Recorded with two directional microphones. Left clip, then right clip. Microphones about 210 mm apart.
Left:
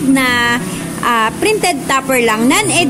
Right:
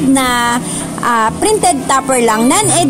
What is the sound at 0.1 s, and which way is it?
Speech, 20° right (ahead or behind).